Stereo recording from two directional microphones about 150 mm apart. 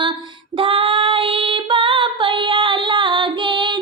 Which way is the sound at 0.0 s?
35° right (ahead or behind).